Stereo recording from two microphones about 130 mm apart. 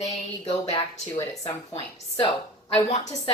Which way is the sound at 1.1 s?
30° left (ahead or behind).